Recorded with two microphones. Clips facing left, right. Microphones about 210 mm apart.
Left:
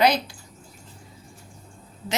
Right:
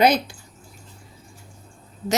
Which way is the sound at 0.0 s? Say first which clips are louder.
Right 3 dB; 50° right (ahead or behind).